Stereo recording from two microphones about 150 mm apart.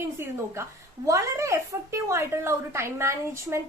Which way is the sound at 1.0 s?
20° right (ahead or behind).